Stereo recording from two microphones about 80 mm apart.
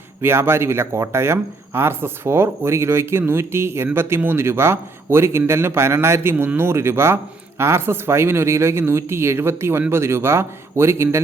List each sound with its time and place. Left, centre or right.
0.2 s speech: right